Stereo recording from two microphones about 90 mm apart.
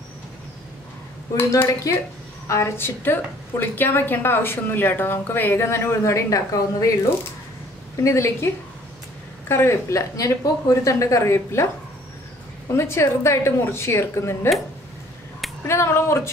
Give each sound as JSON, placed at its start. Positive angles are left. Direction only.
{"t": 1.5, "sound": "a woman's voice", "side_deg": 35}
{"t": 9.5, "sound": "speech", "side_deg": 30}
{"t": 12.6, "sound": "a woman's voice", "side_deg": 30}
{"t": 15.6, "sound": "speech", "side_deg": 30}